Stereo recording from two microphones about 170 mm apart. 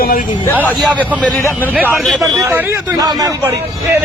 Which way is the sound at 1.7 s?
10° right (ahead or behind).